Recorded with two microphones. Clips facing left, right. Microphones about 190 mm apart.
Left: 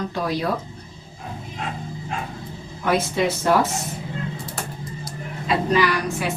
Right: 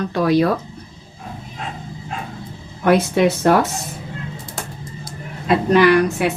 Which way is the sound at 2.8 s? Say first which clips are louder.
Right 6 dB; 65° right (ahead or behind).